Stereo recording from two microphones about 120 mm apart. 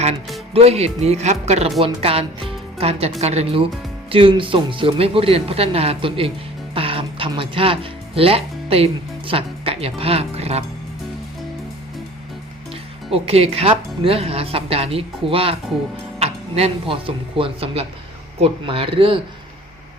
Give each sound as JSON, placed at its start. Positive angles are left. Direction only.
{"t": 0.5, "sound": "speech", "side_deg": -60}
{"t": 1.8, "sound": "speech", "side_deg": -55}
{"t": 4.1, "sound": "speech", "side_deg": -45}
{"t": 13.1, "sound": "speech", "side_deg": -55}